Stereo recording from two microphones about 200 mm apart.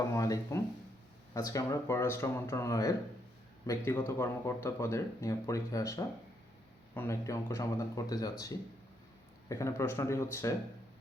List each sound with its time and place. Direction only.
0.0 s speech: 15° left (ahead or behind)